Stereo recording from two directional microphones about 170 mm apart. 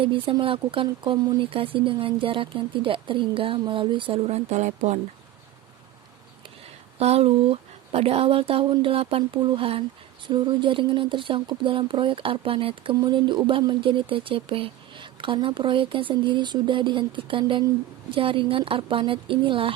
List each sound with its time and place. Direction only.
0.0 s speech: 30° right (ahead or behind)
7.0 s speech: 35° right (ahead or behind)